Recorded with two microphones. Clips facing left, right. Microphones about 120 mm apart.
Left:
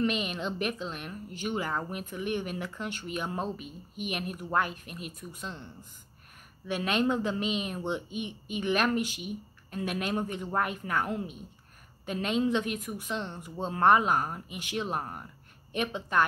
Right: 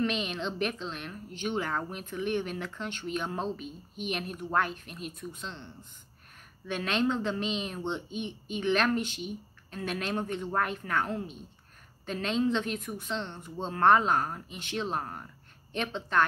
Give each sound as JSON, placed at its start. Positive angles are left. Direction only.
{"t": 0.0, "sound": "a woman's voice", "side_deg": 5}
{"t": 6.7, "sound": "a woman's voice", "side_deg": 10}